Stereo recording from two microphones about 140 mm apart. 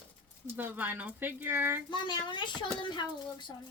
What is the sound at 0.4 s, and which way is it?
Speech, 15° right (ahead or behind).